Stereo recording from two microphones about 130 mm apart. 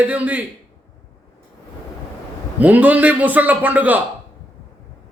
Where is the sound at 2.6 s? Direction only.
10° right (ahead or behind).